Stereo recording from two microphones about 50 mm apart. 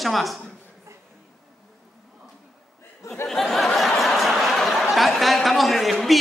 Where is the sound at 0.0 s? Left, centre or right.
Centre.